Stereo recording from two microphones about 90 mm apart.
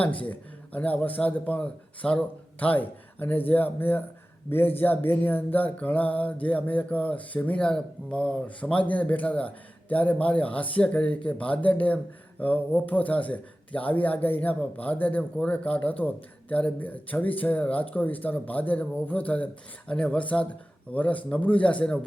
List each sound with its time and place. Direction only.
0.0 s speech: 15° left (ahead or behind)